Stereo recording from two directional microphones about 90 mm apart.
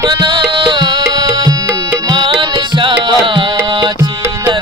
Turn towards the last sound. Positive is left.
turn(degrees=-55)  # may be behind; listen again after turning